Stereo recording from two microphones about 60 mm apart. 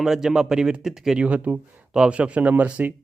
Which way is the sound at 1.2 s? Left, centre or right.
Right.